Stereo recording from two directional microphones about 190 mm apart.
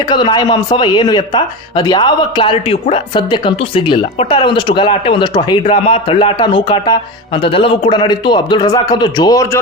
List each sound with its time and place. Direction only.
0.1 s speech: 20° left (ahead or behind)